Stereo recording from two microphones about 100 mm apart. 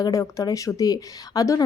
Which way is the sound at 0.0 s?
35° left (ahead or behind).